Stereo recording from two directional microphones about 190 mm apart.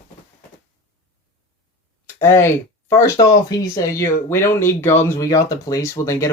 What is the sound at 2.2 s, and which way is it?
Speech, 15° left (ahead or behind).